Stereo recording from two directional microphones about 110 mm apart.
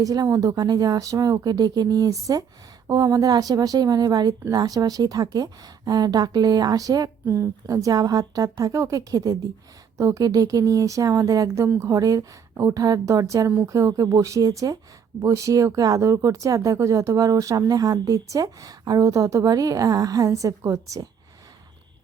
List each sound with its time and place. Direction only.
0.0 s speech: 35° right (ahead or behind)